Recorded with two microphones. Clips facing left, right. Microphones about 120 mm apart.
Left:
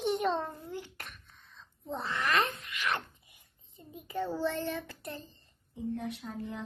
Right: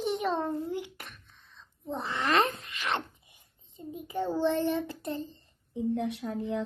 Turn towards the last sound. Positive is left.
turn(degrees=-85)